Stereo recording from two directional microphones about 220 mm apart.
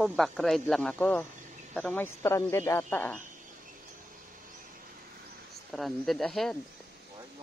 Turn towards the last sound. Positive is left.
turn(degrees=0)  # may be behind; listen again after turning